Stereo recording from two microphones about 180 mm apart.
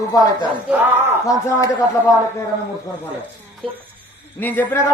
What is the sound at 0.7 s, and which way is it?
Speech, 10° right (ahead or behind).